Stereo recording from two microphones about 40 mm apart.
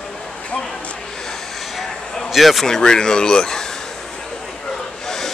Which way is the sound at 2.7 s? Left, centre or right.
Centre.